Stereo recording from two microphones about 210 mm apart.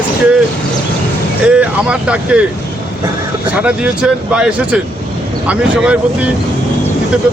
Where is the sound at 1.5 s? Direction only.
5° right (ahead or behind).